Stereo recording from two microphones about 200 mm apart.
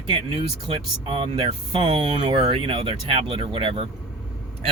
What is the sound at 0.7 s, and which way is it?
Speech, 25° right (ahead or behind).